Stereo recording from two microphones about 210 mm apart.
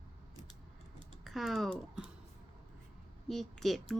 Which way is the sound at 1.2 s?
Centre (ahead or behind).